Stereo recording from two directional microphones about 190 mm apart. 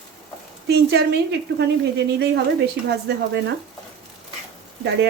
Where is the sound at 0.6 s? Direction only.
60° right (ahead or behind).